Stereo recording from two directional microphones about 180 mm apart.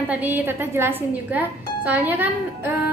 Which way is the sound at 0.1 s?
10° right (ahead or behind).